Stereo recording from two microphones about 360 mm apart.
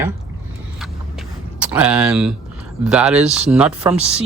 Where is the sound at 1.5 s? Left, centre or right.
Centre.